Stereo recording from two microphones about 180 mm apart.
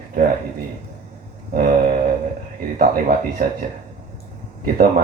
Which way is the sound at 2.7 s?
50° right (ahead or behind).